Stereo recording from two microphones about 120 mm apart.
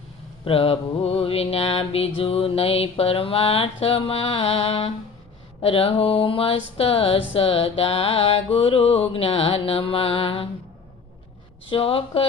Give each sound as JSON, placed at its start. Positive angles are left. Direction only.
{"t": 0.4, "sound": "music", "side_deg": 50}
{"t": 11.7, "sound": "music", "side_deg": 50}